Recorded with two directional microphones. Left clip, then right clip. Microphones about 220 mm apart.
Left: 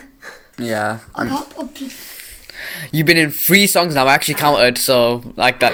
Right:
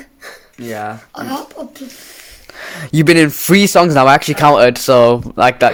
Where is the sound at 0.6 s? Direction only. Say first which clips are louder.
Left 4 dB; 35° left (ahead or behind).